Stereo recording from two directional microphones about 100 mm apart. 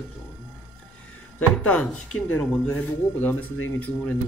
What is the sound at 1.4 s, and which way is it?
Speech, 15° left (ahead or behind).